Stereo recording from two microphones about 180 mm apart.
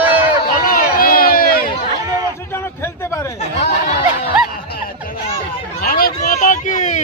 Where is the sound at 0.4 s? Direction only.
55° left (ahead or behind).